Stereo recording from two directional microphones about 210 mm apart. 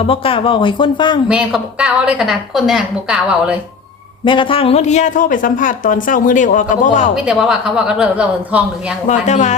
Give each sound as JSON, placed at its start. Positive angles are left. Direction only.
{"t": 0.1, "sound": "speech", "side_deg": 25}
{"t": 1.3, "sound": "a woman's voice", "side_deg": -5}
{"t": 4.3, "sound": "speech", "side_deg": 25}
{"t": 7.3, "sound": "a woman's voice", "side_deg": 0}
{"t": 9.0, "sound": "speech", "side_deg": 35}